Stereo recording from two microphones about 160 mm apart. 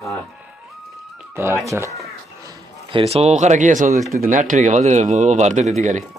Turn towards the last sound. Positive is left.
turn(degrees=-45)  # may be behind; listen again after turning